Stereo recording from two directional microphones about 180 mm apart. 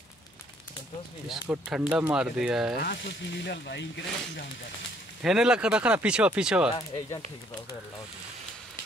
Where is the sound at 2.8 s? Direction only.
65° left (ahead or behind).